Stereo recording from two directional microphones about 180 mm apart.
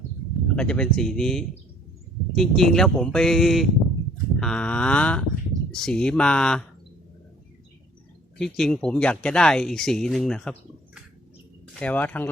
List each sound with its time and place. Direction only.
0.5 s speech: 5° left (ahead or behind)
4.4 s a sound: 5° left (ahead or behind)
5.7 s speech: 5° left (ahead or behind)
8.4 s speech: centre (ahead or behind)
11.7 s speech: 5° left (ahead or behind)